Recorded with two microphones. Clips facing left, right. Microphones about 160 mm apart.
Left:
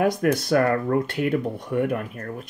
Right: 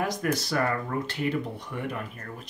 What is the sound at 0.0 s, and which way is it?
Speech, 55° left (ahead or behind).